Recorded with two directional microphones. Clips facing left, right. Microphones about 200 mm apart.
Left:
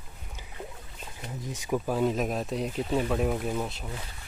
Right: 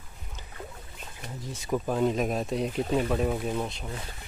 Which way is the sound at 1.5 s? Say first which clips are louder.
Even; 10° left (ahead or behind).